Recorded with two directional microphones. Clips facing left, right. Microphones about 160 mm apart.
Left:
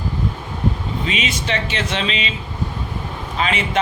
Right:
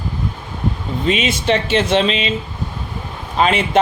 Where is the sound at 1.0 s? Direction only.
50° right (ahead or behind).